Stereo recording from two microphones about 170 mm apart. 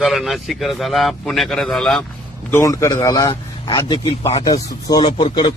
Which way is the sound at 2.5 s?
15° left (ahead or behind).